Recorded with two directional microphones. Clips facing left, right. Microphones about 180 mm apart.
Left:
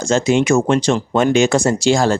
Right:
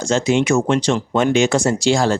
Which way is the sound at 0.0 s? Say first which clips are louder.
Left 2 dB; 45° left (ahead or behind).